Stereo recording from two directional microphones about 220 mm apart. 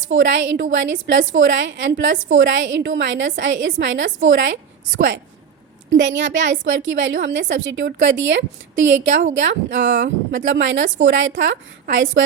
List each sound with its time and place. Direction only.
0.0 s a woman's voice: 60° right (ahead or behind)
5.9 s a woman's voice: 55° right (ahead or behind)